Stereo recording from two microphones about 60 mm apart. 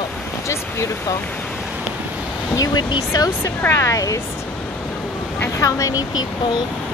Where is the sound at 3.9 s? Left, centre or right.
Left.